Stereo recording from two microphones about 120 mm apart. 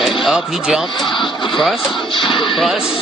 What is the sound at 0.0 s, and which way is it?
A man's voice, centre (ahead or behind).